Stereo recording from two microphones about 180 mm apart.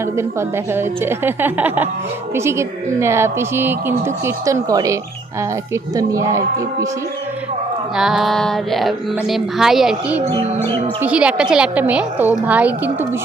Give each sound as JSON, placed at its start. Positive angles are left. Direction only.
{"t": 0.0, "sound": "speech", "side_deg": -15}
{"t": 7.9, "sound": "a sound", "side_deg": 0}
{"t": 11.0, "sound": "speech", "side_deg": -5}